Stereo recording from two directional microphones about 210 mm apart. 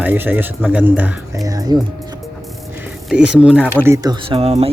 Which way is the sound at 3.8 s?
15° right (ahead or behind).